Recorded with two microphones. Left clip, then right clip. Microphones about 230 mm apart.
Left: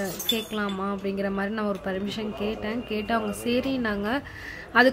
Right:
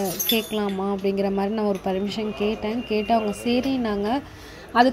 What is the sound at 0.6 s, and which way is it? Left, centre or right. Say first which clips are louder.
A woman's voice: right 4 dB; centre.